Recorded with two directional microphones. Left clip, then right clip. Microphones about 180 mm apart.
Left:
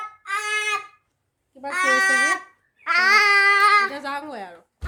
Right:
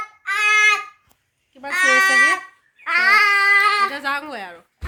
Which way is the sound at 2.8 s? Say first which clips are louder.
Right 2 dB; 55° left (ahead or behind).